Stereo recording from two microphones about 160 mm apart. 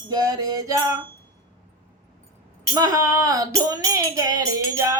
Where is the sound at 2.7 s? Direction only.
20° right (ahead or behind).